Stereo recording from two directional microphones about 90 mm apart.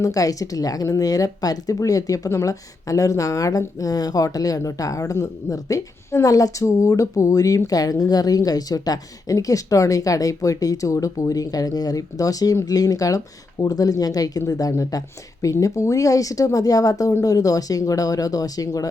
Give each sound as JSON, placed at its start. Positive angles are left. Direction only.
{"t": 0.0, "sound": "speech", "side_deg": 40}